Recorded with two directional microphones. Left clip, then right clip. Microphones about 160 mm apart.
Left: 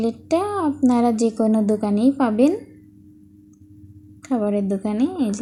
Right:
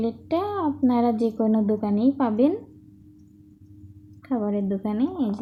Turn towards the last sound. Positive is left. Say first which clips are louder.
# left 4 dB
turn(degrees=15)  # may be behind; listen again after turning